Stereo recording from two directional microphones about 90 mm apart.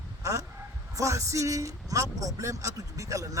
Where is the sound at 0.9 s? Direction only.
35° right (ahead or behind).